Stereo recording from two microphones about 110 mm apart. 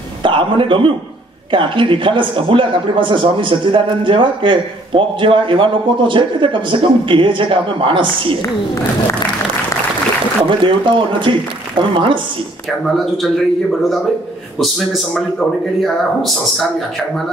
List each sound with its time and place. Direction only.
0.2 s a sound: 50° right (ahead or behind)
1.5 s speech: 50° right (ahead or behind)
10.6 s speech: 50° right (ahead or behind)
14.6 s speech: centre (ahead or behind)